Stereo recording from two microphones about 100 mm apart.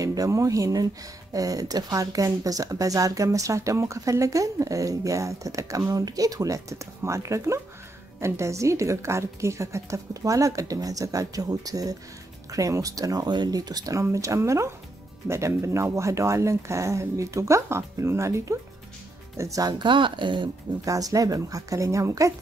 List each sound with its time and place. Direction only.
0.0 s speech: 35° right (ahead or behind)
19.8 s a woman's voice: 55° right (ahead or behind)
20.8 s speech: 35° right (ahead or behind)